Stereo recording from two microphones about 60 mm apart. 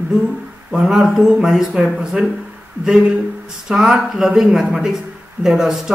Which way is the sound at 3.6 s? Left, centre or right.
Centre.